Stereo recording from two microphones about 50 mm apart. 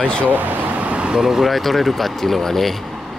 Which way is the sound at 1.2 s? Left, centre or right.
Centre.